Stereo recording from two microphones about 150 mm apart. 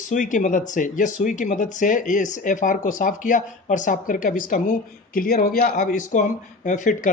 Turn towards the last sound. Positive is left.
turn(degrees=60)  # may be behind; listen again after turning